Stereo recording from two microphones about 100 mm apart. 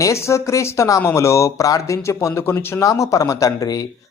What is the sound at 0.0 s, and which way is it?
Speech, 30° left (ahead or behind).